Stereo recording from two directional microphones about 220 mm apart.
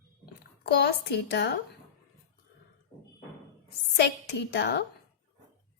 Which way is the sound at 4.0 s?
50° left (ahead or behind).